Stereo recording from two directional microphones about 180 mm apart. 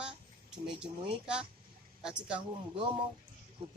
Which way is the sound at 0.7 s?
5° right (ahead or behind).